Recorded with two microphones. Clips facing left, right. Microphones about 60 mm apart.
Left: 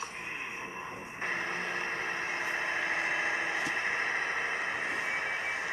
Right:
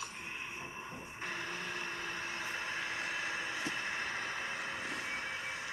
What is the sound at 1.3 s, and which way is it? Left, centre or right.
Vehicle, left.